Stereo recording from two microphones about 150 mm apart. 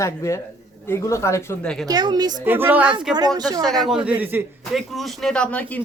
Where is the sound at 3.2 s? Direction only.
25° right (ahead or behind).